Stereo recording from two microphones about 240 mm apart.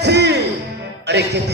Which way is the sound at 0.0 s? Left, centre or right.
Right.